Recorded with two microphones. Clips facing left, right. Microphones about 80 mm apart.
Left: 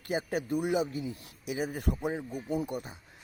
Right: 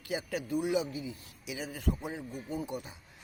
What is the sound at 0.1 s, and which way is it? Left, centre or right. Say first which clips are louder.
Speech: left 3 dB; left.